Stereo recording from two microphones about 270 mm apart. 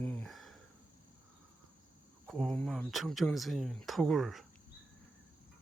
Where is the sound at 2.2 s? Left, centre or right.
Centre.